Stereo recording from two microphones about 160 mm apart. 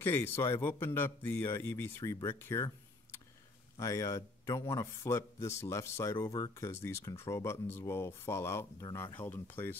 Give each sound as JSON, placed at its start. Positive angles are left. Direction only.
{"t": 0.0, "sound": "speech", "side_deg": 15}